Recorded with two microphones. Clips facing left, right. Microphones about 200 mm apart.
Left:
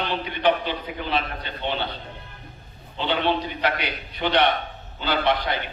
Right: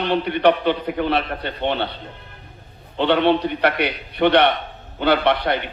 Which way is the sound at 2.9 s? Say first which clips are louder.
Right 7 dB; 65° right (ahead or behind).